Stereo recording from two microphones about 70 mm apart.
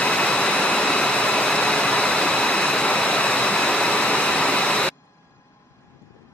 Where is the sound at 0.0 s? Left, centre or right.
Centre.